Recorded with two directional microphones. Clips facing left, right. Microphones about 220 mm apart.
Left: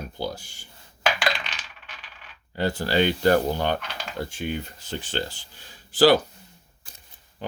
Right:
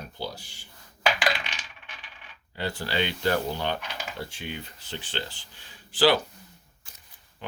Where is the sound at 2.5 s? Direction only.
45° left (ahead or behind).